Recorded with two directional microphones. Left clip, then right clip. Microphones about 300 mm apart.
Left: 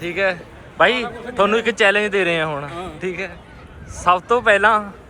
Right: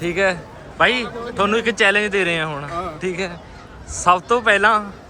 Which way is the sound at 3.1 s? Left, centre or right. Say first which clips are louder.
Right 2 dB; centre.